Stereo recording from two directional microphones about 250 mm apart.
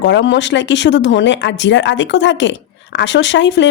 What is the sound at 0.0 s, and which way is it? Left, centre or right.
A woman's voice, left.